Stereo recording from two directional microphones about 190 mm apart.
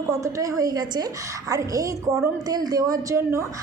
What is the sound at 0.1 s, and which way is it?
A woman's voice, 15° right (ahead or behind).